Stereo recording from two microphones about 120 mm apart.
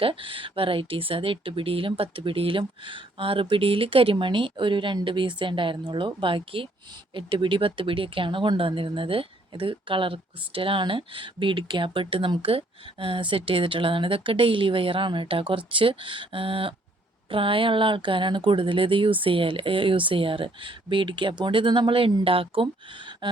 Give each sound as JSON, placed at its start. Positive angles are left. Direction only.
{"t": 0.0, "sound": "speech", "side_deg": -45}